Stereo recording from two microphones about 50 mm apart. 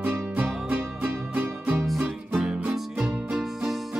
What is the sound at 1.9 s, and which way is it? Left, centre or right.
Music, centre.